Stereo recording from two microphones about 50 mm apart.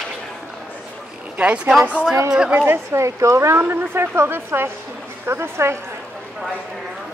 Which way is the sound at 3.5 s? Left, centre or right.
Right.